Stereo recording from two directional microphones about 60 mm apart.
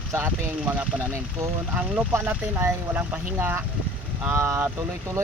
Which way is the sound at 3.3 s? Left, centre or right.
Right.